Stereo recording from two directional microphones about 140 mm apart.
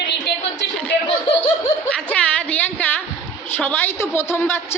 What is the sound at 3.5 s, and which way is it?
A woman's voice, 15° left (ahead or behind).